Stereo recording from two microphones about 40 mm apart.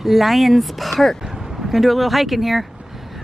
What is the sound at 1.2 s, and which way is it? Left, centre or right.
Speech, centre.